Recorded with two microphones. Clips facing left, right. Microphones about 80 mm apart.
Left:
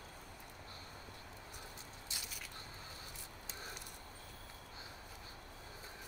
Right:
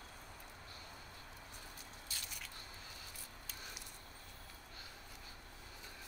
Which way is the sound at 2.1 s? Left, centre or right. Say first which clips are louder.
Left 1 dB; left.